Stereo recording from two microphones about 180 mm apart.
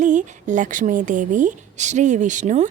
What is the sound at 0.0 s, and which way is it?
A woman's voice, 45° right (ahead or behind).